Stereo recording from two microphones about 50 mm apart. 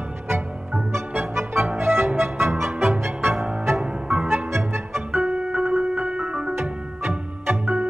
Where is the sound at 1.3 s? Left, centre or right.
Right.